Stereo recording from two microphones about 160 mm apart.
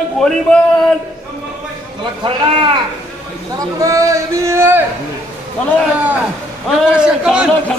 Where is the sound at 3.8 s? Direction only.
20° right (ahead or behind).